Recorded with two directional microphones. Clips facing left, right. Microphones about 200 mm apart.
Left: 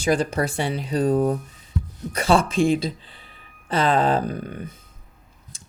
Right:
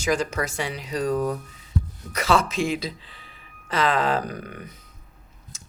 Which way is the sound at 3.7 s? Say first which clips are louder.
Left 3 dB; 30° left (ahead or behind).